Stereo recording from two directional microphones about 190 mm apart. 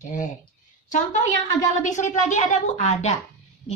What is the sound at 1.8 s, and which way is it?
A woman's voice, 40° left (ahead or behind).